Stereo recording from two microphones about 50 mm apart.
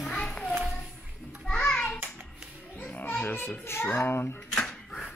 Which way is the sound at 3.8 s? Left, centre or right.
Left.